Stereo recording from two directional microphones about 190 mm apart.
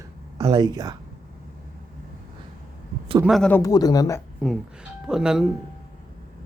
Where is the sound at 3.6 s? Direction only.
20° left (ahead or behind).